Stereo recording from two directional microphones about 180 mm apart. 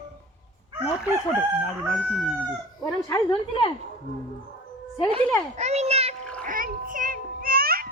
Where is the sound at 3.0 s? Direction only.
25° left (ahead or behind).